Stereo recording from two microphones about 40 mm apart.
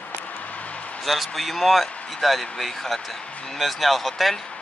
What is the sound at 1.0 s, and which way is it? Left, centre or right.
Speech, centre.